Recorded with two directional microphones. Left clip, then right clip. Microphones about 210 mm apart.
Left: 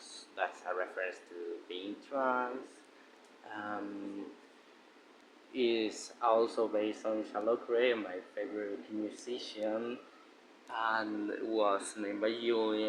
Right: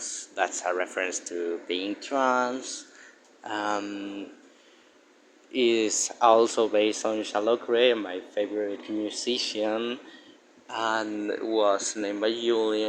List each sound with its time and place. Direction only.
0.3 s speech: 35° right (ahead or behind)
3.5 s speech: 40° right (ahead or behind)
5.5 s speech: 35° right (ahead or behind)
10.7 s speech: 30° right (ahead or behind)